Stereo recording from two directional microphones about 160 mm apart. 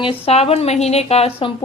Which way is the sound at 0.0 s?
35° left (ahead or behind).